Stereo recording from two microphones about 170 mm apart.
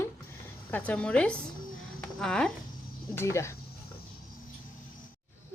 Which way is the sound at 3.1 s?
15° left (ahead or behind).